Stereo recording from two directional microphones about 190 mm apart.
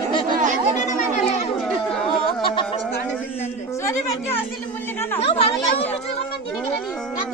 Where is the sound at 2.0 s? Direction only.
25° left (ahead or behind).